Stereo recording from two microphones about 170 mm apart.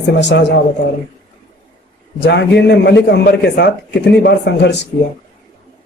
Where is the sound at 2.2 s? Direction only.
90° left.